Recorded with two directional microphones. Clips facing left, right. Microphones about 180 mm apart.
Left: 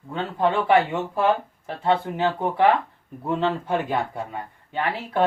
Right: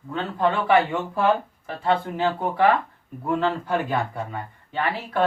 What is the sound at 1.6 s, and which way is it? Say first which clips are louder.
Speech: left 1 dB; 20° left (ahead or behind).